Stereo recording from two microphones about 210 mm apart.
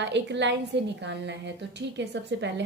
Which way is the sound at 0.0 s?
55° right (ahead or behind).